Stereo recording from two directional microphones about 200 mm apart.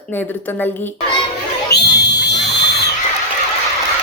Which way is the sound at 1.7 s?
55° left (ahead or behind).